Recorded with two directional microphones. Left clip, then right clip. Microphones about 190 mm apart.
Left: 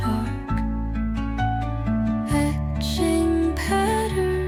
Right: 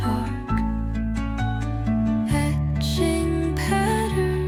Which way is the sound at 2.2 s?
Centre (ahead or behind).